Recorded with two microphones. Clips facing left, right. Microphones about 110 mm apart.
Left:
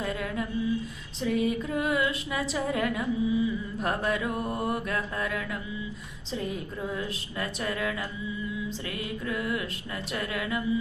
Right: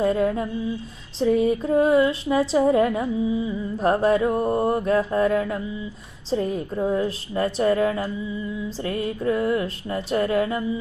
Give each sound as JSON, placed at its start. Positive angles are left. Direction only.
{"t": 0.0, "sound": "speech", "side_deg": -30}